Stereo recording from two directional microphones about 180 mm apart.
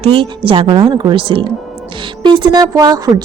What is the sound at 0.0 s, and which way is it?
Speech, 30° right (ahead or behind).